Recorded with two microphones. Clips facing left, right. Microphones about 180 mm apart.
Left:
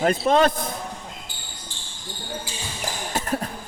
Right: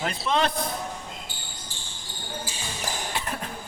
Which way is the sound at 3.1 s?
40° left (ahead or behind).